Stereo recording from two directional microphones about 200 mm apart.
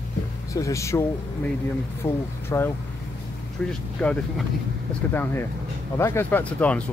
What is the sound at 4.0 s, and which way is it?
Speech, 5° left (ahead or behind).